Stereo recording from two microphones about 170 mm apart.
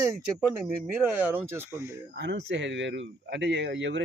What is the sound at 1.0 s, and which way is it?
Speech, 10° right (ahead or behind).